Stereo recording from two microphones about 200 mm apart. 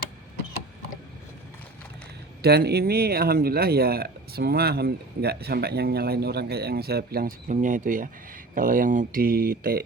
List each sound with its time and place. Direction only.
2.4 s speech: 55° right (ahead or behind)